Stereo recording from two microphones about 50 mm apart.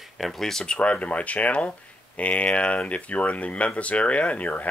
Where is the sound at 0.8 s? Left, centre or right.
Left.